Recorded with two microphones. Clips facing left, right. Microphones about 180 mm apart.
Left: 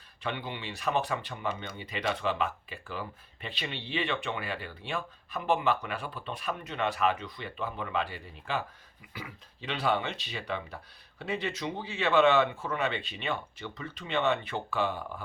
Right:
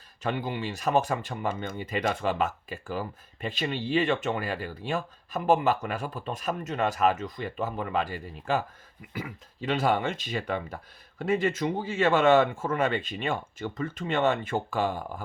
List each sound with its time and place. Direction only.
0.2 s speech: 40° right (ahead or behind)